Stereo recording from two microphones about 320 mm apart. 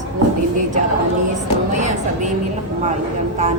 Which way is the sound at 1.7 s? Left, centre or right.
Right.